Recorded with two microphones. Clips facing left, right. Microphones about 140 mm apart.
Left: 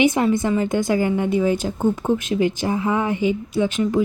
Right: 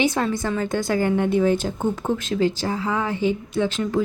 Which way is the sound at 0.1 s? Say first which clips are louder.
Left 5 dB; 20° left (ahead or behind).